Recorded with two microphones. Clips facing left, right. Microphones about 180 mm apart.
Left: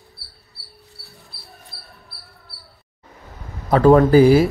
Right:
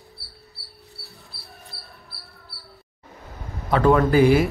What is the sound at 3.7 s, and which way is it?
Speech, 40° left (ahead or behind).